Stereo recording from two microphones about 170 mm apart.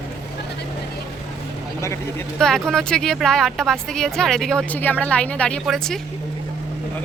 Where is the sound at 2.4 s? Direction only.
5° left (ahead or behind).